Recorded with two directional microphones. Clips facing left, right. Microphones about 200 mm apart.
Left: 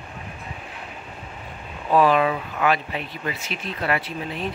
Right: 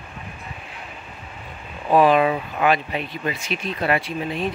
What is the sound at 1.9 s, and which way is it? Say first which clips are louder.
Speech: right 2 dB; 15° right (ahead or behind).